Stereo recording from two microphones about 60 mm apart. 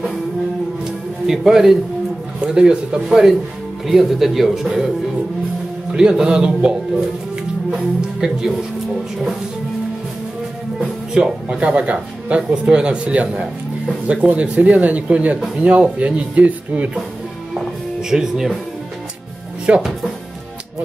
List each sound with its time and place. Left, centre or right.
1.2 s speech: centre
5.9 s speech: centre
7.7 s speech: centre
11.4 s speech: centre
18.1 s speech: centre
19.7 s speech: centre